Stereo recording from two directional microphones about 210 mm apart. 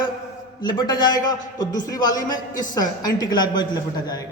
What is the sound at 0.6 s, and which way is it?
A man's voice, 20° left (ahead or behind).